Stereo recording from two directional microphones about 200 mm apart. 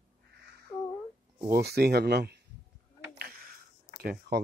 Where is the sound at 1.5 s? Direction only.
50° right (ahead or behind).